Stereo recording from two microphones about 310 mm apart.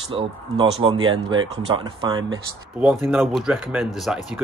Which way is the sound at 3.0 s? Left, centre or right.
Centre.